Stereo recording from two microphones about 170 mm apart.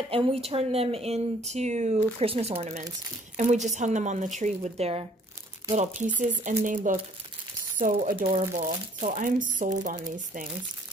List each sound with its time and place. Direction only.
0.1 s speech: 35° right (ahead or behind)
6.1 s speech: 50° right (ahead or behind)